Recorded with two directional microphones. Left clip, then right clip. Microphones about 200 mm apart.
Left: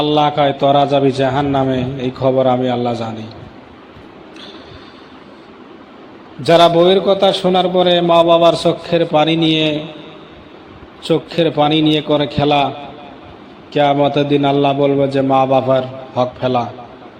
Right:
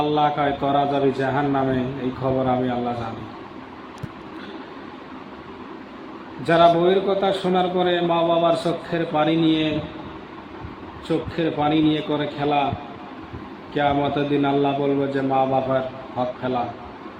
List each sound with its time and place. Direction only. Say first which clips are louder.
0.0 s a man's voice: left 7 dB; 35° left (ahead or behind)
6.4 s a man's voice: left 6 dB; 40° left (ahead or behind)
11.1 s a man's voice: left 9 dB; 40° left (ahead or behind)
13.7 s a man's voice: left 8 dB; 35° left (ahead or behind)